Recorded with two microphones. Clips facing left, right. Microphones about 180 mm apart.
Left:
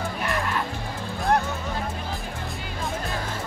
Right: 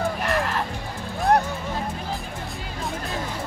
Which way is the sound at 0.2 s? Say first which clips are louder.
Right 3 dB; 40° right (ahead or behind).